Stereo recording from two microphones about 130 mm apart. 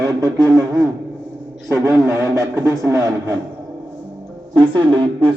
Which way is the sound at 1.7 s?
25° right (ahead or behind).